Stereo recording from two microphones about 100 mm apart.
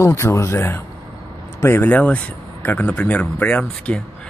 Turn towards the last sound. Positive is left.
turn(degrees=10)  # may be behind; listen again after turning